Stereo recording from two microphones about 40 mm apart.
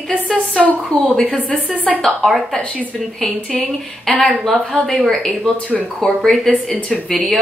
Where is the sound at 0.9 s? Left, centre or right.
Centre.